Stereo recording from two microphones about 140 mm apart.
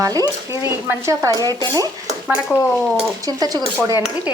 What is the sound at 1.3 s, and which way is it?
Speech, 25° left (ahead or behind).